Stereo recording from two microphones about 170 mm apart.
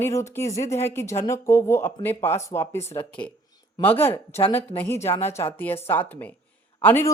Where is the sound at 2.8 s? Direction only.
40° left (ahead or behind).